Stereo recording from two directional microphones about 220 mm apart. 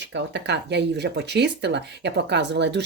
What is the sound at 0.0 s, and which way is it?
Speech, 55° right (ahead or behind).